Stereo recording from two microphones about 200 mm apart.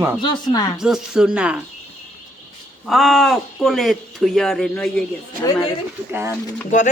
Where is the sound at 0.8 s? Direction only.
Centre (ahead or behind).